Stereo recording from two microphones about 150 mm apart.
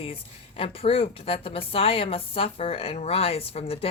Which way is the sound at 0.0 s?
35° left (ahead or behind).